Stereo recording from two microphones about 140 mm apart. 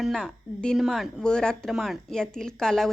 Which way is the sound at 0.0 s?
5° right (ahead or behind).